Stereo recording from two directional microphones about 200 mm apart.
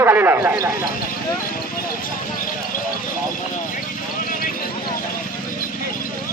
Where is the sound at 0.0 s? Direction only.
10° right (ahead or behind).